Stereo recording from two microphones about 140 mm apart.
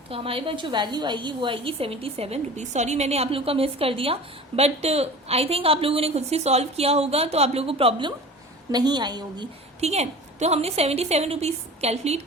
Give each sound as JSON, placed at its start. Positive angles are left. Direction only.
{"t": 0.1, "sound": "a woman's voice", "side_deg": -40}
{"t": 9.8, "sound": "a woman's voice", "side_deg": -50}